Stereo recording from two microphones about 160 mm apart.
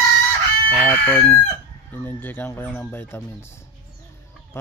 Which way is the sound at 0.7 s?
10° left (ahead or behind).